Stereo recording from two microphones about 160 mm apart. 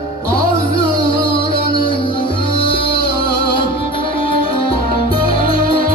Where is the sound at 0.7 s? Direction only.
35° left (ahead or behind).